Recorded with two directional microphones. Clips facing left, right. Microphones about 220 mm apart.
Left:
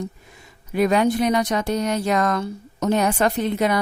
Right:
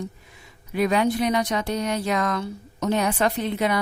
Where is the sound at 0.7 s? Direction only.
45° left (ahead or behind).